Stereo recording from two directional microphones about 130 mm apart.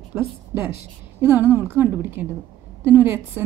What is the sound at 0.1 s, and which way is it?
A woman's voice, 20° right (ahead or behind).